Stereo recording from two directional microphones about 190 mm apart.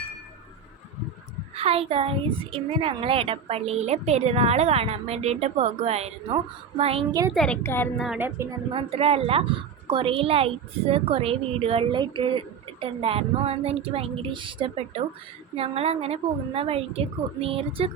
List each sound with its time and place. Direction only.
1.5 s a woman's voice: 30° right (ahead or behind)
7.1 s speech: 20° right (ahead or behind)
7.3 s a woman's voice: 5° left (ahead or behind)
7.9 s speech: centre (ahead or behind)
8.7 s a woman's voice: 30° right (ahead or behind)